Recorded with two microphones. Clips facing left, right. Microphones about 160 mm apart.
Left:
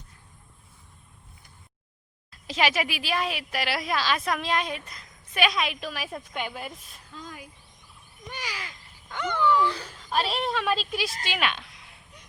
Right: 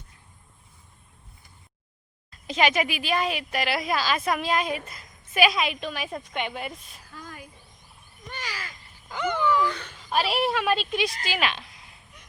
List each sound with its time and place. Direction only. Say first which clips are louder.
2.3 s speech: right 2 dB; centre (ahead or behind)
7.2 s a sound: left 1 dB; 15° left (ahead or behind)
8.3 s crow: even; 10° left (ahead or behind)
8.6 s a sound: right 1 dB; 5° right (ahead or behind)
9.6 s speech: even; 30° left (ahead or behind)
10.1 s speech: right 3 dB; 5° right (ahead or behind)